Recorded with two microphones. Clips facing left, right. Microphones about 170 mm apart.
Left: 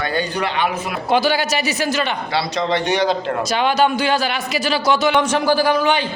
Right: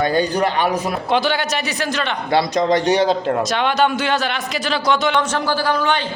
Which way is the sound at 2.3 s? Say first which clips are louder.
Right 9 dB; 50° right (ahead or behind).